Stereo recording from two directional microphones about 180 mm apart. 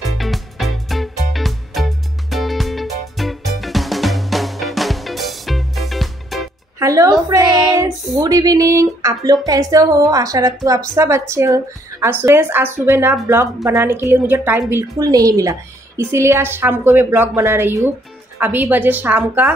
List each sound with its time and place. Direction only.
0.2 s music: centre (ahead or behind)
6.8 s a woman's voice: 20° right (ahead or behind)